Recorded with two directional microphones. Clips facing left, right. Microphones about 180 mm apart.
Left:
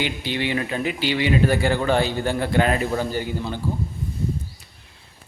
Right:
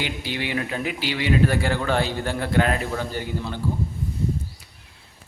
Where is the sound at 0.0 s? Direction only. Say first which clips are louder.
Left 3 dB; 5° right (ahead or behind).